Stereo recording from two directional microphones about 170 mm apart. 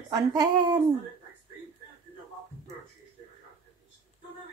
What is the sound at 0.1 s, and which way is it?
Speech, 20° right (ahead or behind).